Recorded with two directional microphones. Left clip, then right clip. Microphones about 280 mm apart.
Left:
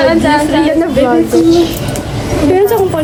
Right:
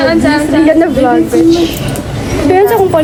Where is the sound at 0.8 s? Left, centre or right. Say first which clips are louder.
Right 1 dB; centre.